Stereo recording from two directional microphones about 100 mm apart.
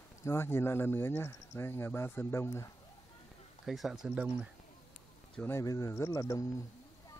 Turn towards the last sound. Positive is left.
turn(degrees=35)  # may be behind; listen again after turning